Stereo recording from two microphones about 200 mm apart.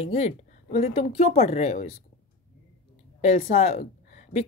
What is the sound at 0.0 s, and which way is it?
Speech, 30° left (ahead or behind).